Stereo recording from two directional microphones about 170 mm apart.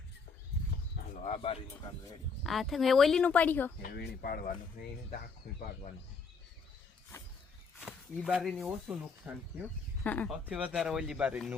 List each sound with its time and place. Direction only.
0.9 s bird: 45° left (ahead or behind)
2.4 s speech: centre (ahead or behind)
3.8 s speech: 65° left (ahead or behind)
8.1 s speech: centre (ahead or behind)
10.0 s speech: 10° left (ahead or behind)
10.4 s speech: 5° right (ahead or behind)